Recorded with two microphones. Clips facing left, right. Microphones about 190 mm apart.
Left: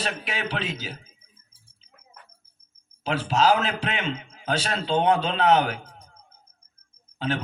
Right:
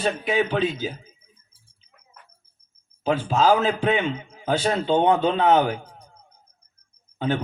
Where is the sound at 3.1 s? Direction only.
90° left.